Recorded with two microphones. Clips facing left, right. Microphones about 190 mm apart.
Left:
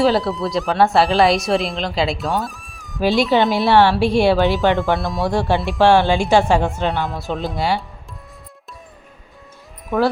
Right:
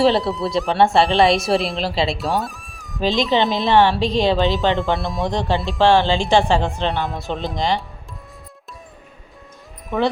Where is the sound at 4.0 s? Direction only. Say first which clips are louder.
Left 3 dB; 10° left (ahead or behind).